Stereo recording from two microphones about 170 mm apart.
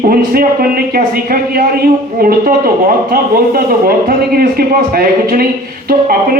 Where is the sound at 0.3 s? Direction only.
60° right (ahead or behind).